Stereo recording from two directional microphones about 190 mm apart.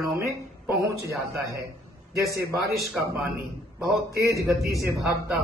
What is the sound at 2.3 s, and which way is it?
Speech, 15° right (ahead or behind).